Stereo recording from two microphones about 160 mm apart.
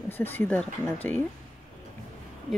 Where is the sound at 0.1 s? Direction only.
10° left (ahead or behind).